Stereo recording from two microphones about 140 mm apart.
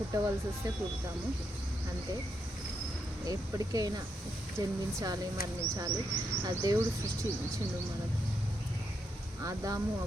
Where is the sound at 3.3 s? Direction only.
25° right (ahead or behind).